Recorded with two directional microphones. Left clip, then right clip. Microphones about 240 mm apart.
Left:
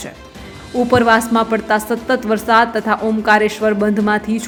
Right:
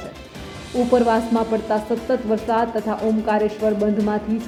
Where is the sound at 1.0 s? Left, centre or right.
Centre.